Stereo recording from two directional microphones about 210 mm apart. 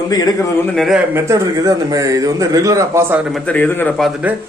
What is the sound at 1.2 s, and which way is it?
A man's voice, 15° right (ahead or behind).